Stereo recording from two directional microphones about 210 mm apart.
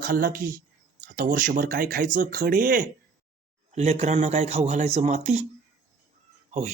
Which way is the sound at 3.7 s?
30° right (ahead or behind).